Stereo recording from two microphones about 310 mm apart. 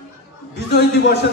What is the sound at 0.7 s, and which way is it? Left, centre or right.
Speech, left.